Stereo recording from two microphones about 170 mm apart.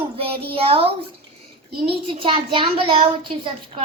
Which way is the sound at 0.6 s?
35° right (ahead or behind).